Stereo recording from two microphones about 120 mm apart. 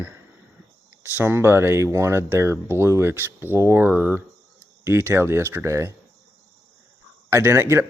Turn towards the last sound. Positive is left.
turn(degrees=-20)  # may be behind; listen again after turning